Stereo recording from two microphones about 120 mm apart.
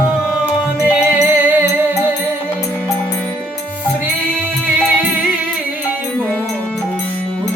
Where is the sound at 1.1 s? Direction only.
15° right (ahead or behind).